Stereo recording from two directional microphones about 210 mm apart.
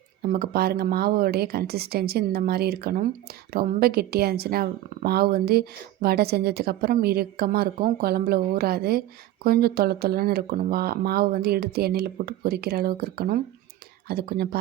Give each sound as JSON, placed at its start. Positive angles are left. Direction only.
{"t": 0.2, "sound": "speech", "side_deg": -45}